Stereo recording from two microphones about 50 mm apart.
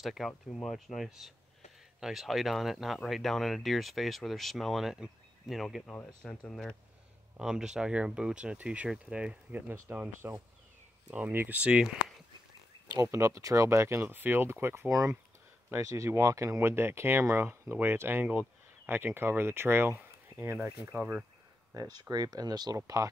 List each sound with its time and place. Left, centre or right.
0.0 s speech: centre
4.8 s speech: centre
6.2 s speech: centre
7.3 s speech: centre
9.5 s speech: right
11.1 s speech: right
13.0 s speech: right
14.0 s speech: right
15.7 s speech: right
16.5 s speech: right
18.2 s speech: right
18.9 s speech: right
20.9 s speech: right
22.7 s speech: right